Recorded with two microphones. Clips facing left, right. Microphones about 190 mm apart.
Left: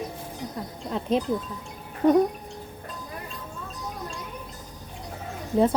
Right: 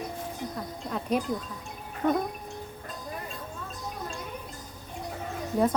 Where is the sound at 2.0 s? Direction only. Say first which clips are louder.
Left 7 dB; 10° left (ahead or behind).